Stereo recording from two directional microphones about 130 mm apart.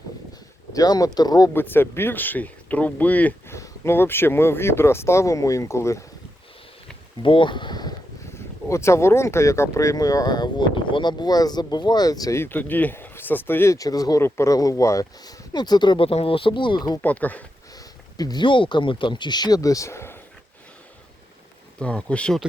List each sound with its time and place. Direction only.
0.7 s speech: 30° left (ahead or behind)
1.5 s speech: 15° left (ahead or behind)
7.2 s speech: 40° left (ahead or behind)
8.7 s speech: 20° left (ahead or behind)
17.0 s speech: 10° left (ahead or behind)
17.7 s speech: 30° left (ahead or behind)
21.8 s speech: 10° left (ahead or behind)